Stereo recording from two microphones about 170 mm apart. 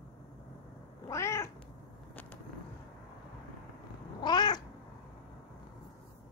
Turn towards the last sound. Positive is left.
turn(degrees=25)  # may be behind; listen again after turning